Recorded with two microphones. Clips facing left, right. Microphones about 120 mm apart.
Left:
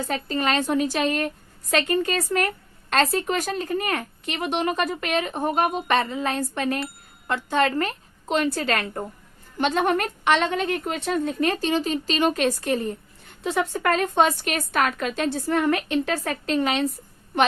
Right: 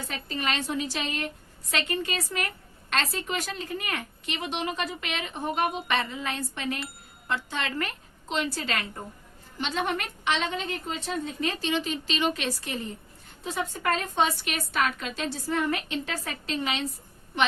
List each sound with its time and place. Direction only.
0.1 s speech: 45° left (ahead or behind)
13.4 s a woman's voice: 70° left (ahead or behind); by 16.8 s 55° left (ahead or behind)